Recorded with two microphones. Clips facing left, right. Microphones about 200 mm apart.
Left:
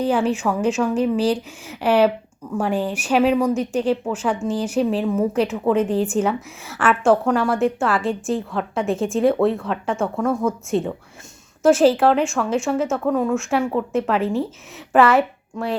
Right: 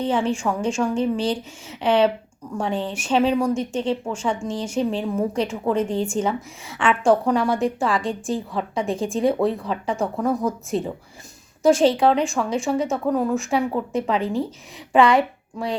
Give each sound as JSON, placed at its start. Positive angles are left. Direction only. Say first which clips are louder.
{"t": 0.0, "sound": "a woman's voice", "louder": "left 2 dB", "side_deg": 5}
{"t": 3.5, "sound": "speech", "louder": "left 2 dB", "side_deg": -30}
{"t": 3.8, "sound": "speech", "louder": "left 3 dB", "side_deg": 5}
{"t": 9.0, "sound": "speech", "louder": "left 3 dB", "side_deg": -30}
{"t": 9.2, "sound": "a woman's voice", "louder": "left 3 dB", "side_deg": 0}